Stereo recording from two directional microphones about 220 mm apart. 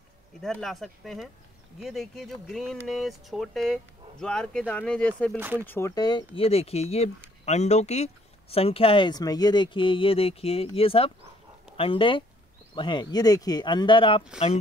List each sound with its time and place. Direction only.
0.4 s speech: centre (ahead or behind)
5.4 s speech: 10° right (ahead or behind)
5.7 s speech: 15° left (ahead or behind)